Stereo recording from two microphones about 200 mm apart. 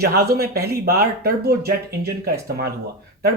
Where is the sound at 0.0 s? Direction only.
50° right (ahead or behind).